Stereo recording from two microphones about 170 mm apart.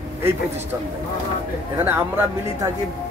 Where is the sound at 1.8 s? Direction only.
15° right (ahead or behind).